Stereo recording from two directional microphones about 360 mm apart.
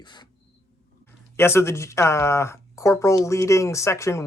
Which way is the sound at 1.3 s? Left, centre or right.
Centre.